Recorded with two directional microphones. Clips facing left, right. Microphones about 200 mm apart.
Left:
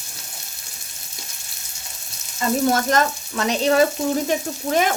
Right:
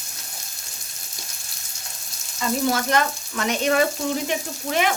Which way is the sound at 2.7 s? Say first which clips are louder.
Left 3 dB; 40° left (ahead or behind).